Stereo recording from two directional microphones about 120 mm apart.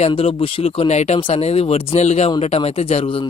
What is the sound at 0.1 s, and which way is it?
Speech, 50° left (ahead or behind).